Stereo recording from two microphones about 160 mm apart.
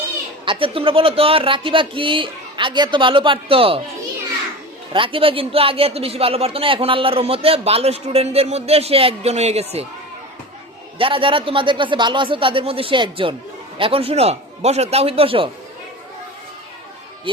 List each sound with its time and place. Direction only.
0.4 s speech: 35° right (ahead or behind)
4.9 s speech: 30° right (ahead or behind)
10.9 s speech: 35° right (ahead or behind)